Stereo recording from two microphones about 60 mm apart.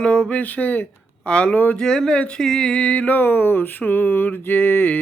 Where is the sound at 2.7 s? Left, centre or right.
Left.